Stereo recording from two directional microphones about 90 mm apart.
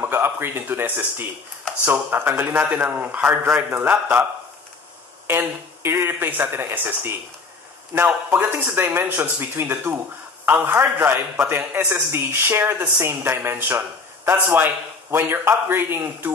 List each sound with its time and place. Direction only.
0.0 s a woman's voice: 25° right (ahead or behind)